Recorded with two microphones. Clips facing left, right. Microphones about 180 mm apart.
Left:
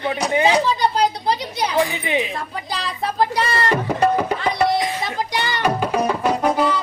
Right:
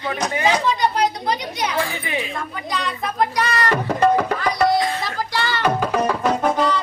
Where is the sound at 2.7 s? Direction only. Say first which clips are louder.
Left 1 dB; 30° left (ahead or behind).